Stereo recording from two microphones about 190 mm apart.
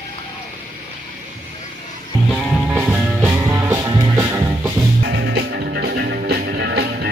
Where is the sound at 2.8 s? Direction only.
5° right (ahead or behind).